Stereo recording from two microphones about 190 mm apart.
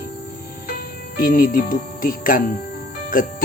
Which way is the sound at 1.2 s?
50° left (ahead or behind).